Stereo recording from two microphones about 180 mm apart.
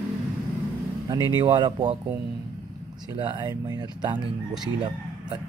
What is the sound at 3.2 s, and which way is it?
Speech, 25° right (ahead or behind).